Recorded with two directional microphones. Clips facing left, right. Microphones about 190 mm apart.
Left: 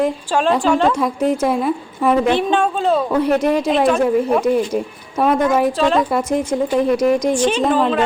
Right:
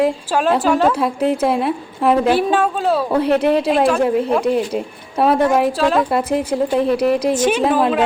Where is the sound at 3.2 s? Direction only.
30° right (ahead or behind).